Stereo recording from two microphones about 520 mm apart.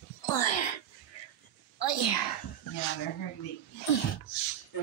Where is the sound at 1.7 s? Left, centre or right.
Left.